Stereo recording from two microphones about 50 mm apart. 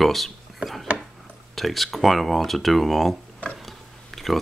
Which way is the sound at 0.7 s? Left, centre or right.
Centre.